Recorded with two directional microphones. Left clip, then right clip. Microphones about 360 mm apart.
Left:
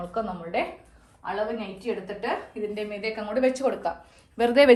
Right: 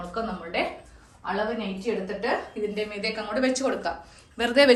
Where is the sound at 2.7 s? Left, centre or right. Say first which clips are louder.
Even; left.